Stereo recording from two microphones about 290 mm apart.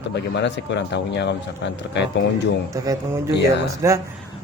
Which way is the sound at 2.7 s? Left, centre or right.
Centre.